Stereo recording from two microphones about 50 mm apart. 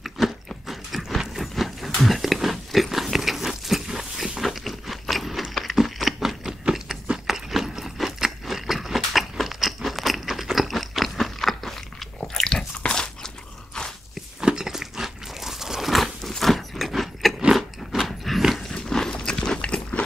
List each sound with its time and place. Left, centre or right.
0.0 s biting: centre
1.3 s a sound: centre
12.4 s biting: centre
14.4 s crunch: centre
17.6 s biting: centre
18.6 s a sound: centre